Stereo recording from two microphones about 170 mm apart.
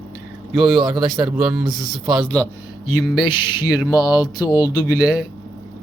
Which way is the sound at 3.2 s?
25° left (ahead or behind).